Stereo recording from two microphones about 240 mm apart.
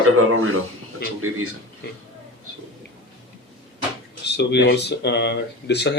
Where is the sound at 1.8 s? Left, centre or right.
Left.